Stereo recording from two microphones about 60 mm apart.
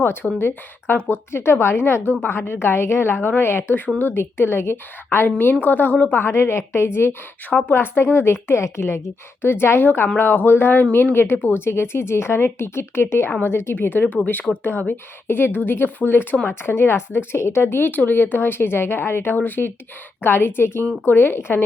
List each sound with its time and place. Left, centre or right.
0.0 s a woman's voice: left
5.6 s a woman's voice: left
6.2 s a woman's voice: left